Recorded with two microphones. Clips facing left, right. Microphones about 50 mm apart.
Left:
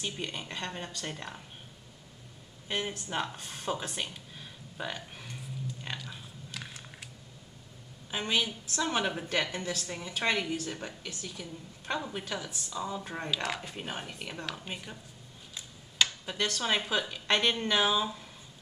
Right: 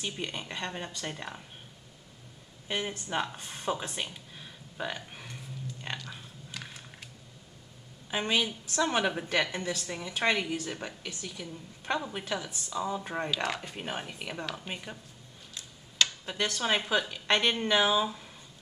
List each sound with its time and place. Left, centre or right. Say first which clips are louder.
0.0 s a woman's voice: right 1 dB; centre
2.7 s speech: right 1 dB; centre
6.5 s a sound: even; centre
8.1 s a woman's voice: right 2 dB; centre
13.3 s a woman's voice: right 1 dB; centre
16.3 s a woman's voice: right 1 dB; centre